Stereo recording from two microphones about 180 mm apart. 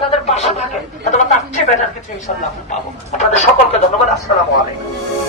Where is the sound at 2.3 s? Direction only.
45° left (ahead or behind).